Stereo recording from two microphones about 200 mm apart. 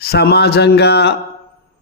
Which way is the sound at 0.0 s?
50° left (ahead or behind).